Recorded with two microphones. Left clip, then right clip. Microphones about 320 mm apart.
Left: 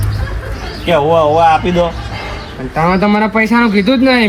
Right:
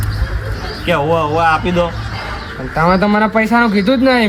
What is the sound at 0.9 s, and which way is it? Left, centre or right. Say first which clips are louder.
A man's voice: left 5 dB; centre.